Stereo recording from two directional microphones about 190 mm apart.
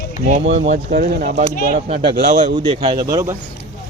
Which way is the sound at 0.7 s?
50° right (ahead or behind).